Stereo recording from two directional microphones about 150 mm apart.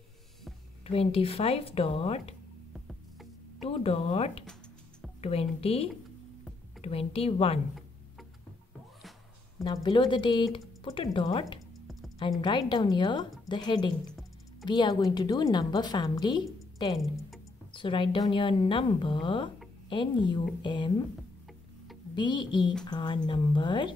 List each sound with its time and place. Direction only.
0.8 s speech: 40° left (ahead or behind)
2.7 s music: centre (ahead or behind)
3.6 s speech: 40° left (ahead or behind)
9.8 s a woman's voice: 30° left (ahead or behind)
22.1 s speech: 30° left (ahead or behind)